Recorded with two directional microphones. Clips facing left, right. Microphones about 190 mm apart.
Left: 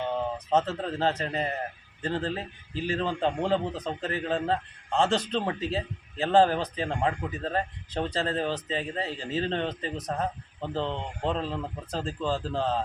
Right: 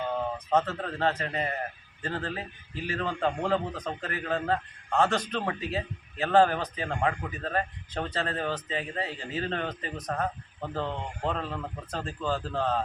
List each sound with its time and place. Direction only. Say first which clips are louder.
0.0 s a man's voice: left 1 dB; 25° left (ahead or behind)